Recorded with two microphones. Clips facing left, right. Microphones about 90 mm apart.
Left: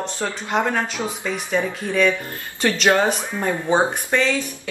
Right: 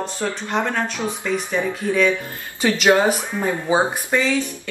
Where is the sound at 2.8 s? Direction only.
10° right (ahead or behind).